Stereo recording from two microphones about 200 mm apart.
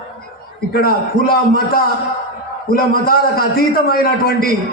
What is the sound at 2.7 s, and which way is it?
A man's voice, 50° left (ahead or behind).